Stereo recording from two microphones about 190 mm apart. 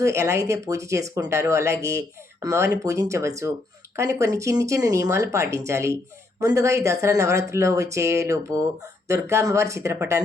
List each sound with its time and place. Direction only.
0.0 s speech: 15° right (ahead or behind)